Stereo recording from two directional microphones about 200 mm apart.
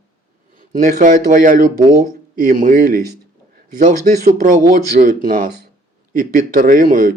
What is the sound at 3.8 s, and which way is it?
Speech, 40° right (ahead or behind).